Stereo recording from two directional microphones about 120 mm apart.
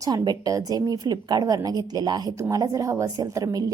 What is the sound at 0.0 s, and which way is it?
A woman's voice, 30° right (ahead or behind).